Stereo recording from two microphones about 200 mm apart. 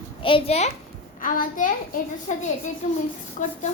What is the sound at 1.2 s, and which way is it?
A child's voice, 40° left (ahead or behind).